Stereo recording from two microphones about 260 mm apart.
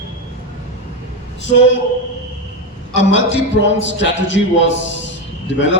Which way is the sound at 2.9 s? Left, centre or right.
Left.